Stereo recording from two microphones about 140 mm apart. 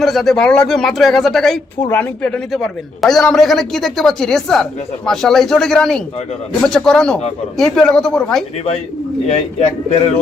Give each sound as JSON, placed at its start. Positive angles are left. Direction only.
{"t": 0.0, "sound": "a woman's voice", "side_deg": 0}
{"t": 9.2, "sound": "speech", "side_deg": 50}